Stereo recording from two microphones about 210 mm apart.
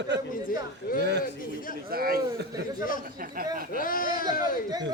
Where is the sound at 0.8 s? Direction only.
50° left (ahead or behind).